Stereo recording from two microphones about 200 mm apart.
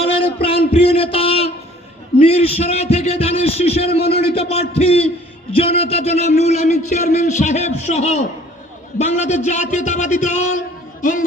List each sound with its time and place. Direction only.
0.0 s a sound: 30° left (ahead or behind)
2.2 s a man's voice: 30° left (ahead or behind)
11.0 s music: 40° left (ahead or behind)